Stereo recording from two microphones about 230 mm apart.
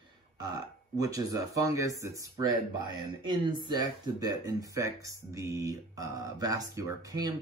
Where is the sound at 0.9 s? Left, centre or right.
Centre.